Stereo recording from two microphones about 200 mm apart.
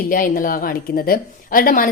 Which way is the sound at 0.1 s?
45° left (ahead or behind).